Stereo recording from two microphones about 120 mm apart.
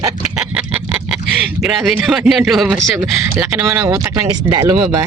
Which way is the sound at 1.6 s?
Centre (ahead or behind).